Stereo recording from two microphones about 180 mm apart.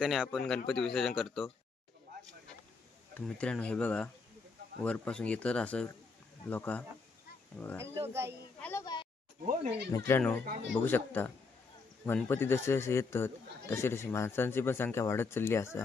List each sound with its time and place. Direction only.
0.0 s speech: centre (ahead or behind)
3.2 s a man's voice: 5° left (ahead or behind)
7.8 s speech: 15° right (ahead or behind)
8.5 s speech: 10° left (ahead or behind)
9.5 s speech: 40° right (ahead or behind)
9.9 s a man's voice: 15° left (ahead or behind)